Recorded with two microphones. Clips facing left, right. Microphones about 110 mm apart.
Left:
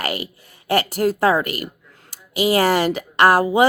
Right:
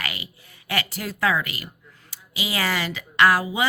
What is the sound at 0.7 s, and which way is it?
A woman's voice, 45° left (ahead or behind).